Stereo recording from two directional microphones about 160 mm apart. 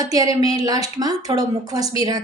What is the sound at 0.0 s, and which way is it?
A woman's voice, 20° right (ahead or behind).